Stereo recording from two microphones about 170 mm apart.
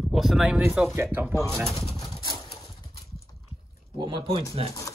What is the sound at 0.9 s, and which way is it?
Speech, 15° right (ahead or behind).